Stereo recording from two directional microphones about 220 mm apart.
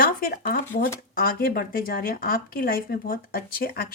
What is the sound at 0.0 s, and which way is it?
Speech, 40° left (ahead or behind).